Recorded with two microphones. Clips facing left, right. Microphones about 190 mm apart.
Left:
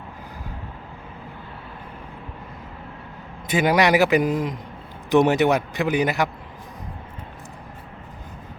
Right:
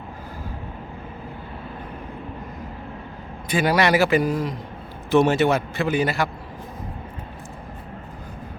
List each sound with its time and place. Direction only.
3.5 s a man's voice: 20° left (ahead or behind)